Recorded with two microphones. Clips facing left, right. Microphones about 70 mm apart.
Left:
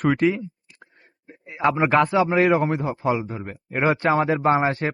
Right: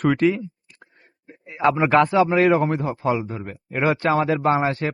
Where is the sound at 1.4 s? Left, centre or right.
Centre; by 4.4 s left.